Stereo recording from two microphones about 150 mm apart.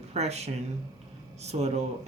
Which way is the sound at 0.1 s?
45° right (ahead or behind).